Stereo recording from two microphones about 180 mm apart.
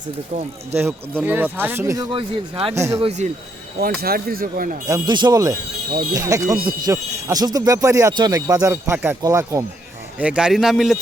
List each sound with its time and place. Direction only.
0.8 s speech: 10° right (ahead or behind)
2.1 s speech: 30° right (ahead or behind)
2.7 s speech: 15° right (ahead or behind)
3.0 s speech: 40° right (ahead or behind)
4.0 s speech: 55° right (ahead or behind)
4.9 s speech: 20° right (ahead or behind)
10.2 s speech: 5° right (ahead or behind)